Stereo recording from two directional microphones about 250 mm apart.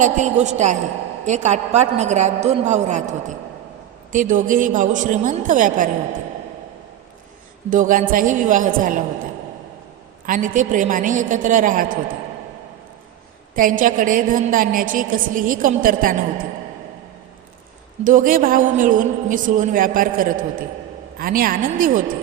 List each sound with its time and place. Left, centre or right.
0.0 s a woman's voice: right
7.7 s a woman's voice: right
10.2 s a woman's voice: right
13.6 s a woman's voice: right
18.0 s a woman's voice: right